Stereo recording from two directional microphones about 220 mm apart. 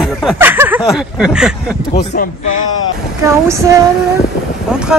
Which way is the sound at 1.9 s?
45° left (ahead or behind).